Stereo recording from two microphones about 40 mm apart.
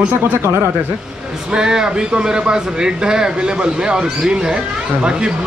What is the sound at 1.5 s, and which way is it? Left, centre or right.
A man's voice, centre.